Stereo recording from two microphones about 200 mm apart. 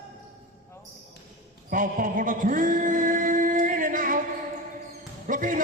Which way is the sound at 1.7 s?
40° right (ahead or behind).